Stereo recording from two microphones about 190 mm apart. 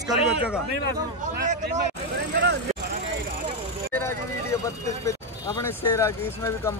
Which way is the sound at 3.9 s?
15° left (ahead or behind).